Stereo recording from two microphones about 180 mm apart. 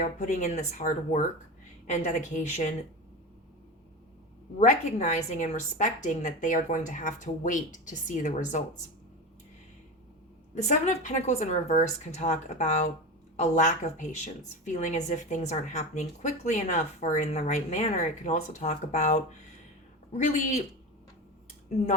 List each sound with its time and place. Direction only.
0.0 s a woman's voice: 45° left (ahead or behind)
4.6 s a woman's voice: 40° left (ahead or behind)
10.5 s a woman's voice: 40° left (ahead or behind)